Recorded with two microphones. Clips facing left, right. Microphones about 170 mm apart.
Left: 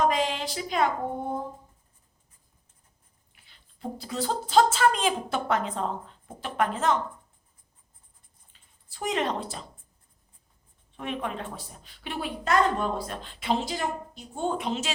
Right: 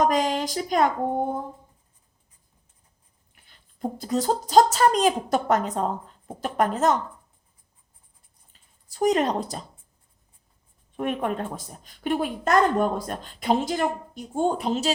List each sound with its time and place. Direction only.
0.0 s a woman's voice: 45° right (ahead or behind)
3.4 s speech: 45° right (ahead or behind)
8.9 s speech: 40° right (ahead or behind)
10.9 s a woman's voice: 50° right (ahead or behind)